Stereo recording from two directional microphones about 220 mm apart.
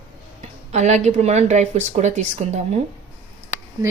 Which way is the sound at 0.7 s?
30° right (ahead or behind).